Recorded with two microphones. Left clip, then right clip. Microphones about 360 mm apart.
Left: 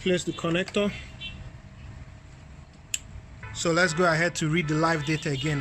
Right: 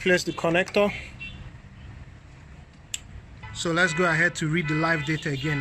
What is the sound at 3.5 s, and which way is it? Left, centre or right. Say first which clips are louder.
Speech: even; centre.